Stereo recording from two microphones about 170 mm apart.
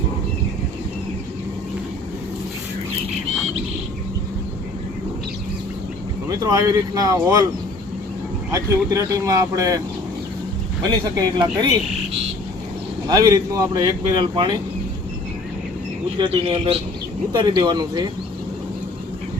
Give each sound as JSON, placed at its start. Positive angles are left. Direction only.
{"t": 6.2, "sound": "speech", "side_deg": -20}
{"t": 8.5, "sound": "speech", "side_deg": -20}
{"t": 10.8, "sound": "speech", "side_deg": -25}
{"t": 13.1, "sound": "speech", "side_deg": -25}
{"t": 16.2, "sound": "speech", "side_deg": -30}